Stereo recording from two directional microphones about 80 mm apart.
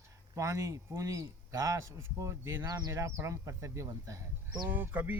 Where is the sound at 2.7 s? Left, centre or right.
Right.